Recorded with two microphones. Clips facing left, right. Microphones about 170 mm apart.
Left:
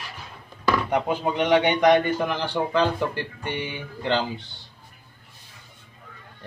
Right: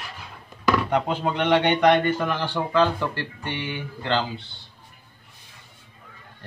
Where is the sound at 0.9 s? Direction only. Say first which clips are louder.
Even; 10° left (ahead or behind).